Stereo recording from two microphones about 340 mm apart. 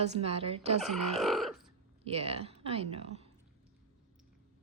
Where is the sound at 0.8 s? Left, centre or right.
Centre.